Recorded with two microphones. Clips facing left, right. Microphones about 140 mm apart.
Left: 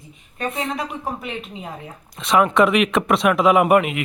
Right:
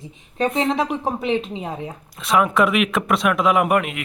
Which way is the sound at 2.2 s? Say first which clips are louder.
Left 2 dB; centre (ahead or behind).